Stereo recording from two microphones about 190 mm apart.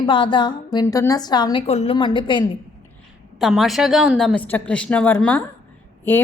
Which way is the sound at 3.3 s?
Centre (ahead or behind).